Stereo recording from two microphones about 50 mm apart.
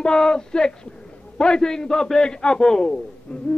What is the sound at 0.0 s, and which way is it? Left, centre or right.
Speech, centre.